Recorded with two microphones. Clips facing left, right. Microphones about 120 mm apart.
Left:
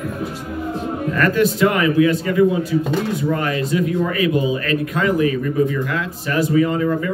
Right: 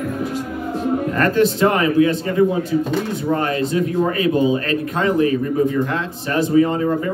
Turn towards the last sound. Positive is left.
turn(degrees=-30)  # may be behind; listen again after turning